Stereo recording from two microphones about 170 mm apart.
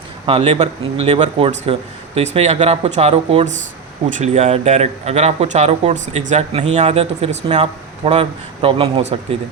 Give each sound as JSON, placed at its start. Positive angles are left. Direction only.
{"t": 0.3, "sound": "speech", "side_deg": -35}